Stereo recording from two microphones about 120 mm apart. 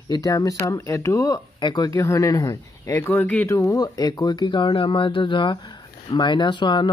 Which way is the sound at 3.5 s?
25° left (ahead or behind).